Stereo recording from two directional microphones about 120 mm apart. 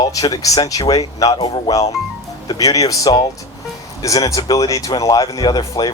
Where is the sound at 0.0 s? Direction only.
30° left (ahead or behind).